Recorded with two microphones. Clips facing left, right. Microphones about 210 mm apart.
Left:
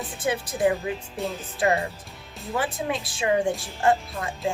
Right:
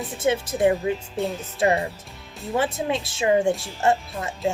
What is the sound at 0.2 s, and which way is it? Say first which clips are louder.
Speech: right 3 dB; 25° right (ahead or behind).